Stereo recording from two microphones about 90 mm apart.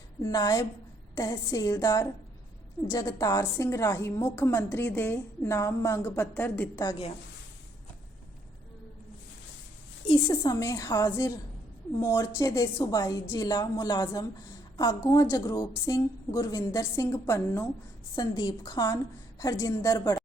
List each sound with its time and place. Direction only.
0.2 s a woman's voice: 45° left (ahead or behind); by 6.7 s 20° left (ahead or behind)
10.2 s a woman's voice: 45° left (ahead or behind)
18.2 s a woman's voice: 45° left (ahead or behind)